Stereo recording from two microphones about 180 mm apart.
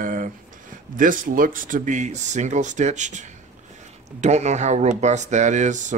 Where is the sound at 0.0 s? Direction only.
50° right (ahead or behind).